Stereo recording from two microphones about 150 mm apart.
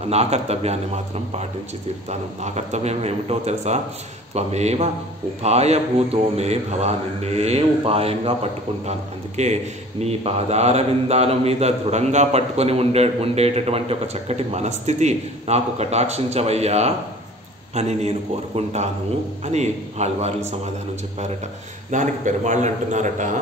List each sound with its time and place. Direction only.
0.1 s speech: 45° right (ahead or behind)
9.4 s speech: 45° right (ahead or behind)
21.9 s speech: 55° right (ahead or behind)